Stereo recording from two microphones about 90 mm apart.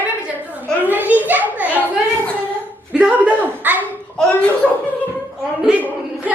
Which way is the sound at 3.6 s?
20° right (ahead or behind).